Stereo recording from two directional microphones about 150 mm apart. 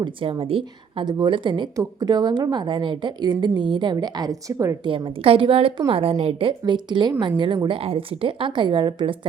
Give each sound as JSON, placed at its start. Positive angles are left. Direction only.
{"t": 0.0, "sound": "a woman's voice", "side_deg": -35}
{"t": 4.9, "sound": "a woman's voice", "side_deg": -35}